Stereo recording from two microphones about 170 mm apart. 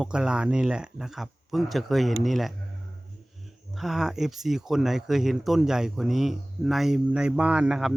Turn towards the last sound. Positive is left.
turn(degrees=-5)  # may be behind; listen again after turning